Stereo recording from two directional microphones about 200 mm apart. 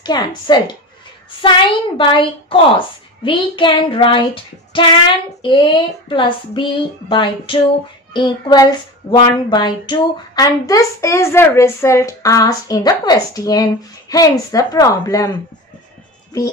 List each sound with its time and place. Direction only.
0.0 s speech: 20° left (ahead or behind)